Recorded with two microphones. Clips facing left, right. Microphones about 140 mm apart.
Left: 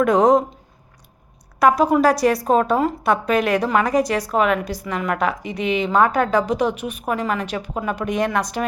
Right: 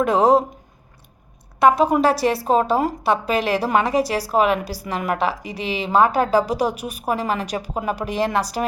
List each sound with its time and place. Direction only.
0.0 s a woman's voice: 30° right (ahead or behind)
2.0 s a woman's voice: 30° right (ahead or behind)